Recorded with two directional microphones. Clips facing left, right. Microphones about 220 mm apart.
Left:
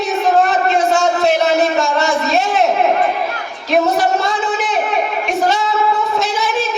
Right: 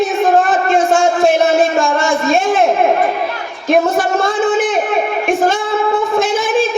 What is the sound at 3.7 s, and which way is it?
Music, 50° right (ahead or behind).